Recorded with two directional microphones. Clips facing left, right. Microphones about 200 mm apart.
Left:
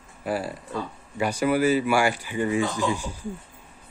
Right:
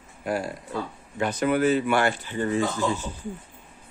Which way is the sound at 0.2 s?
5° left (ahead or behind).